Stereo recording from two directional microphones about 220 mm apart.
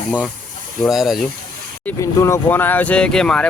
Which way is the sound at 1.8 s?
15° left (ahead or behind).